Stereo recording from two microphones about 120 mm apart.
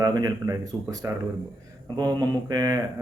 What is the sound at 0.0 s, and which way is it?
Speech, 35° right (ahead or behind).